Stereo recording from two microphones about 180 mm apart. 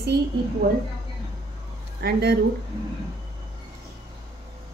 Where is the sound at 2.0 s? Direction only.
60° right (ahead or behind).